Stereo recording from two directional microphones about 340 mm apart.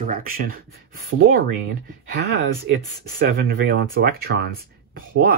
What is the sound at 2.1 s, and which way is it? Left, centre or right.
Speech, right.